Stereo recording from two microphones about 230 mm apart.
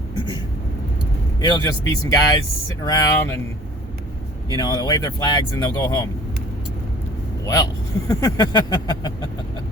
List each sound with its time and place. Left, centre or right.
1.4 s speech: centre
4.5 s speech: centre
7.4 s speech: centre